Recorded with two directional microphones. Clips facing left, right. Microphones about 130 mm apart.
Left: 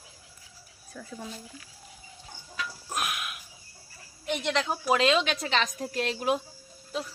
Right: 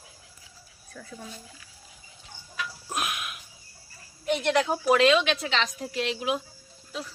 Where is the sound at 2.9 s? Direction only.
Centre (ahead or behind).